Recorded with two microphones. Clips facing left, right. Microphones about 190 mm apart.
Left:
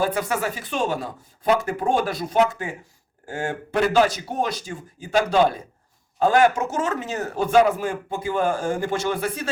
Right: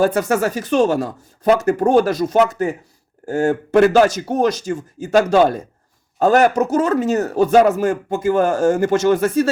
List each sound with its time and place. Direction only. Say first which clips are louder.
0.0 s a man's voice: right 7 dB; 45° right (ahead or behind)